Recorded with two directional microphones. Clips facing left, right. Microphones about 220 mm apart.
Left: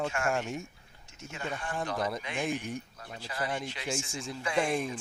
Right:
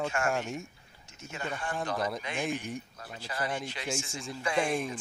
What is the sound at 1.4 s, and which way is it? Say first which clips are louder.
Speech: right 1 dB; 40° right (ahead or behind).